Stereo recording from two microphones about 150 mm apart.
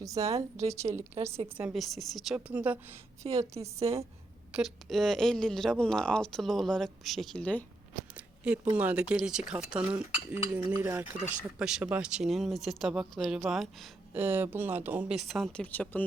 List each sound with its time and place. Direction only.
0.0 s a woman's voice: 20° right (ahead or behind)
1.1 s a woman's voice: 45° right (ahead or behind)
1.7 s a woman's voice: centre (ahead or behind); by 3.7 s 20° right (ahead or behind)
3.8 s a woman's voice: 40° right (ahead or behind)
4.5 s speech: centre (ahead or behind)
8.1 s speech: 10° right (ahead or behind)
14.2 s speech: 15° right (ahead or behind); by 16.0 s 10° left (ahead or behind)